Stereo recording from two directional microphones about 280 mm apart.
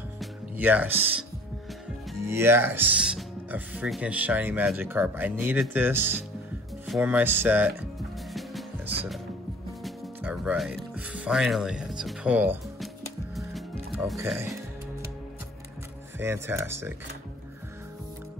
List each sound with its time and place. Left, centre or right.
0.2 s music: centre
2.1 s speech: centre
8.3 s music: centre
9.8 s music: centre
16.2 s speech: centre